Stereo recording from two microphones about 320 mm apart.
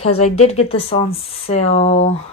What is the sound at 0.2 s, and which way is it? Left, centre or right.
Speech, centre.